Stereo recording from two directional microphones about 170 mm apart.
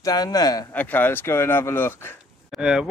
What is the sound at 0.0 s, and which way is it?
Speech, 20° left (ahead or behind).